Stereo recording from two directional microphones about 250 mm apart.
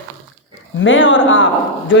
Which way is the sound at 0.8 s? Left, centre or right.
Left.